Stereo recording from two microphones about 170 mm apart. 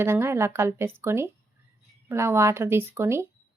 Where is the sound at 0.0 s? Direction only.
15° right (ahead or behind).